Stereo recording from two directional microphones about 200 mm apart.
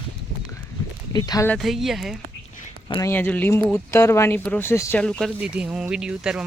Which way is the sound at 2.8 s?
20° left (ahead or behind).